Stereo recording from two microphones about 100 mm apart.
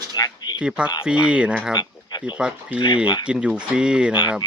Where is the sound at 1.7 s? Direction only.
45° left (ahead or behind).